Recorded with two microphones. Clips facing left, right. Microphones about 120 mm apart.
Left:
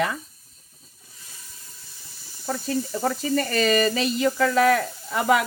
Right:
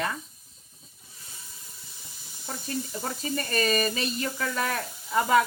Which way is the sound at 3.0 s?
90° left.